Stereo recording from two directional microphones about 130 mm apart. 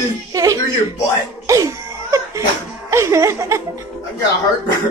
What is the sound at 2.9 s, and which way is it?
Speech, 20° right (ahead or behind).